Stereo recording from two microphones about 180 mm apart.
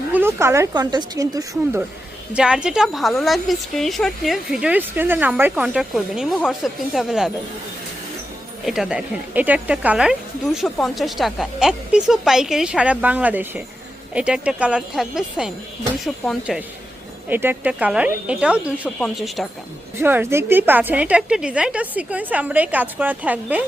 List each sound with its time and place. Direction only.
0.1 s a woman's voice: 15° right (ahead or behind)
2.3 s a woman's voice: 5° right (ahead or behind)
8.6 s a woman's voice: centre (ahead or behind)
20.0 s a woman's voice: 10° right (ahead or behind)